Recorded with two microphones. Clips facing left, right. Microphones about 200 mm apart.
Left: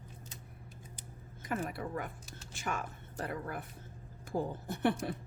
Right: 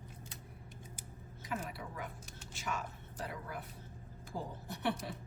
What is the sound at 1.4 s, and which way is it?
Speech, 50° left (ahead or behind).